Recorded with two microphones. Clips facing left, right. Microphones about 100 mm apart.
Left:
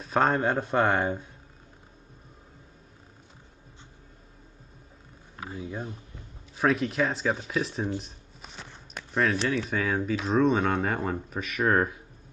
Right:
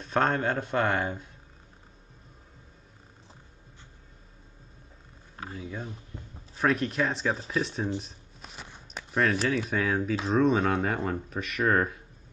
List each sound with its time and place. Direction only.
0.0 s speech: 5° left (ahead or behind)
5.4 s speech: 10° left (ahead or behind)
8.0 s shuffling cards: centre (ahead or behind)
8.6 s a sound: 10° right (ahead or behind)
9.1 s speech: centre (ahead or behind)